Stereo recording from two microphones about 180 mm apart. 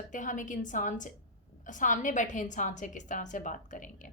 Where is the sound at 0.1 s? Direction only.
45° left (ahead or behind).